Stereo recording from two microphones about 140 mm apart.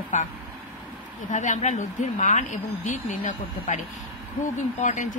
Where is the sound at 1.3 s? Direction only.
60° left (ahead or behind).